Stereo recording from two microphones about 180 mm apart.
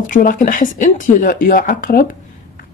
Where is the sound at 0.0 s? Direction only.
50° left (ahead or behind).